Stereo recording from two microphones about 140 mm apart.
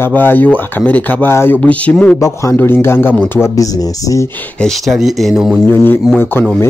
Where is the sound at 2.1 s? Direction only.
20° left (ahead or behind).